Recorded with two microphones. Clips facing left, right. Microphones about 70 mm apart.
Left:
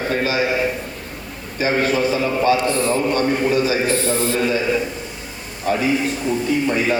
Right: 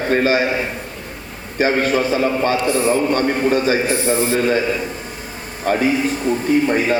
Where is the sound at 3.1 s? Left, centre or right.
Right.